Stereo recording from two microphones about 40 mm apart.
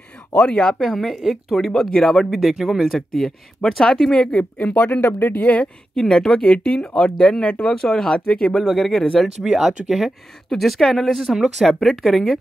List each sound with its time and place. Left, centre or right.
0.4 s speech: left
0.8 s speech: centre
1.9 s speech: centre
2.3 s speech: centre
2.9 s speech: centre
3.8 s speech: centre
4.2 s speech: left
4.7 s speech: left
5.9 s speech: centre
8.5 s speech: centre
9.4 s speech: centre
11.3 s speech: centre